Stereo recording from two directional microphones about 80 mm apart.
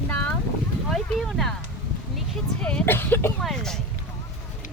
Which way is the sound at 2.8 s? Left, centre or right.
Left.